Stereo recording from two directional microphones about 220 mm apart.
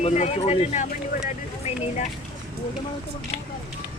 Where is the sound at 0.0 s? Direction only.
30° left (ahead or behind).